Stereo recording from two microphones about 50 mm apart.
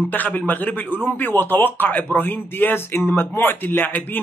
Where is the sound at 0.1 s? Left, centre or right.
Left.